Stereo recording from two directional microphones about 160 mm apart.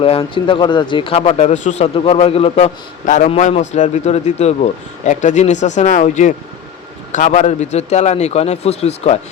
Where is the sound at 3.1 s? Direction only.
45° left (ahead or behind).